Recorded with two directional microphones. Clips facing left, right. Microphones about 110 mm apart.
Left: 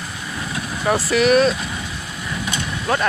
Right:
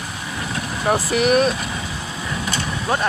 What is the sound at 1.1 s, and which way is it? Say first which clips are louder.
Speech: left 3 dB; 50° right (ahead or behind).